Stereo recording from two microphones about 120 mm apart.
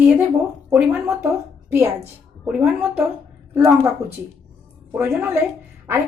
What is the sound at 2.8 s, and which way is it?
Speech, 15° right (ahead or behind).